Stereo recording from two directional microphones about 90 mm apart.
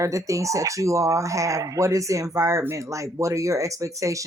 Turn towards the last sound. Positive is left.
turn(degrees=-35)  # may be behind; listen again after turning